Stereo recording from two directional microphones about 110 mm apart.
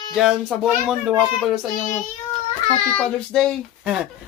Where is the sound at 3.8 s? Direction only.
10° right (ahead or behind).